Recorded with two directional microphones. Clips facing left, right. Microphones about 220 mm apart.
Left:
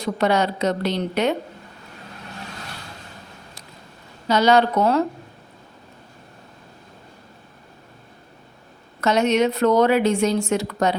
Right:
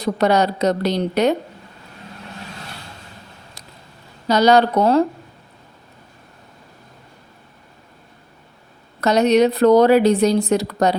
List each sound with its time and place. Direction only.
0.0 s speech: 40° right (ahead or behind)
4.3 s speech: 40° right (ahead or behind)
9.0 s speech: 35° right (ahead or behind)